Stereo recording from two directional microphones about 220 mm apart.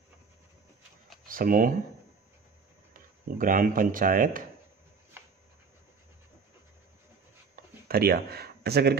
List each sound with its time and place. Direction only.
1.2 s speech: 40° right (ahead or behind)
2.9 s speech: 40° right (ahead or behind)
7.5 s a sound: 45° right (ahead or behind)